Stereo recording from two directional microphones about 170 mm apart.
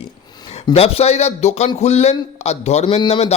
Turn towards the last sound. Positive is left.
turn(degrees=40)  # may be behind; listen again after turning